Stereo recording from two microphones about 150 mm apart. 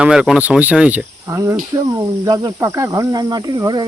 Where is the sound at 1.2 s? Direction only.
20° right (ahead or behind).